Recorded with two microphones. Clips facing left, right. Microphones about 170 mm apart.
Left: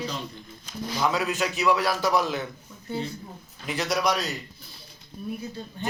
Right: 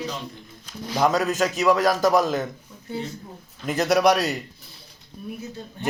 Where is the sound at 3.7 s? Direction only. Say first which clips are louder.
Right 7 dB; 50° right (ahead or behind).